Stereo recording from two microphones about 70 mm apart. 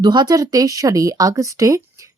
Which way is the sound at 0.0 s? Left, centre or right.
Right.